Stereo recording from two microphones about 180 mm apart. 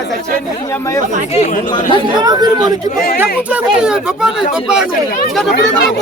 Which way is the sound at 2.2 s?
20° right (ahead or behind).